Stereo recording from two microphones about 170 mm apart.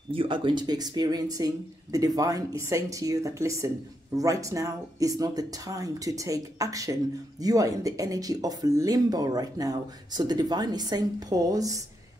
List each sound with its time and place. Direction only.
0.1 s speech: 30° right (ahead or behind)